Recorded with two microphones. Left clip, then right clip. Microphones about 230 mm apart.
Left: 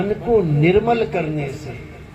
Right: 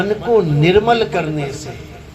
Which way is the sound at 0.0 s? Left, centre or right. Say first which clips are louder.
Right 3 dB; right.